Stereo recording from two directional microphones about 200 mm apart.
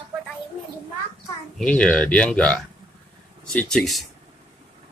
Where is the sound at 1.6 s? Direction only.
5° left (ahead or behind).